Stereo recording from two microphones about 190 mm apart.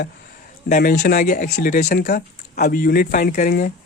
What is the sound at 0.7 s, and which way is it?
Speech, 50° left (ahead or behind).